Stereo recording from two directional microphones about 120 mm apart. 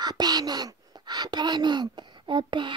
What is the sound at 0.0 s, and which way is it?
Speech, 35° right (ahead or behind).